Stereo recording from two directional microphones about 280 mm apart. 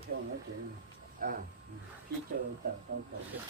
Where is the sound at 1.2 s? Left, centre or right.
Right.